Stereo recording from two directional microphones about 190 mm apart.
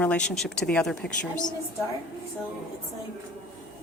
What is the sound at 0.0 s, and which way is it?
Speech, 5° left (ahead or behind).